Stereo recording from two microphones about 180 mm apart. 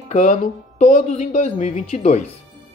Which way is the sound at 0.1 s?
45° left (ahead or behind).